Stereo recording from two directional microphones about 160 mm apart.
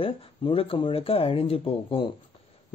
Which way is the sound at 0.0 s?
35° left (ahead or behind).